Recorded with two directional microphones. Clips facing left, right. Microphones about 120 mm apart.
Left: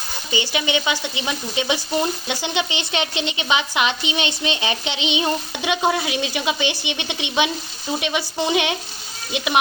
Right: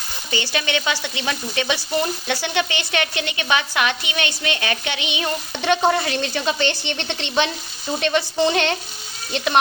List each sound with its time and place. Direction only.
0.3 s frying: 15° left (ahead or behind)
5.9 s a woman's voice: 10° left (ahead or behind)